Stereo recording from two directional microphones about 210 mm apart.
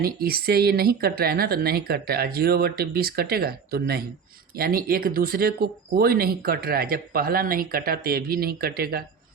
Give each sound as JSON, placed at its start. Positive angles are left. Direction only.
{"t": 0.0, "sound": "speech", "side_deg": -45}